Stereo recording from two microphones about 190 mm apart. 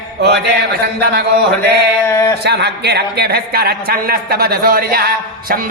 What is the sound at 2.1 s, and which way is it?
Speech, 15° left (ahead or behind).